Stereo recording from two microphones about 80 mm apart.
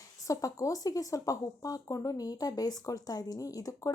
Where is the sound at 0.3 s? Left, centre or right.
Left.